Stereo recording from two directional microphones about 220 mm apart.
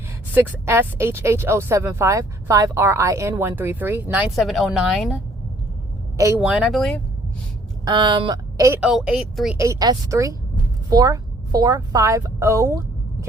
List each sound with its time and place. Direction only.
0.3 s speech: 10° right (ahead or behind)
6.1 s speech: 10° right (ahead or behind)
7.9 s speech: 20° right (ahead or behind); by 9.6 s centre (ahead or behind)
9.6 s a woman's voice: 15° right (ahead or behind)